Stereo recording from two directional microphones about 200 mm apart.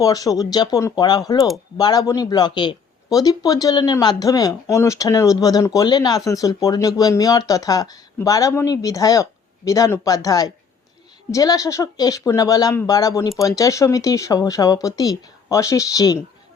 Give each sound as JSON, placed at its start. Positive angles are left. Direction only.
{"t": 0.0, "sound": "speech", "side_deg": 20}